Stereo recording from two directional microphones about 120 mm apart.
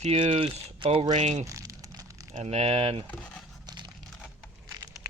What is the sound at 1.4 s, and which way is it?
Crumpling, 25° right (ahead or behind).